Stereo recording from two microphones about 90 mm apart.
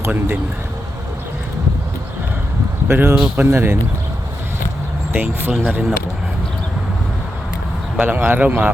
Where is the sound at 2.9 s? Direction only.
25° right (ahead or behind).